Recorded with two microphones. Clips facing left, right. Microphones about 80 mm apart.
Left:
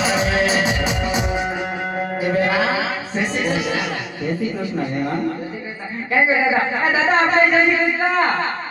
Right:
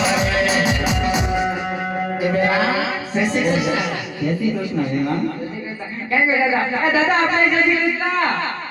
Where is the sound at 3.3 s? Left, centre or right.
Centre.